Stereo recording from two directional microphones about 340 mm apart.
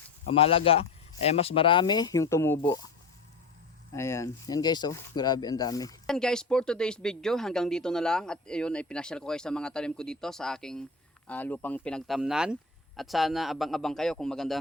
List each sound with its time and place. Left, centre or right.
0.3 s speech: centre
3.9 s speech: centre